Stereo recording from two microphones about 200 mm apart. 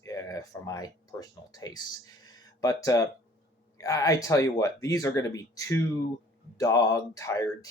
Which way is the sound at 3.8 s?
15° left (ahead or behind).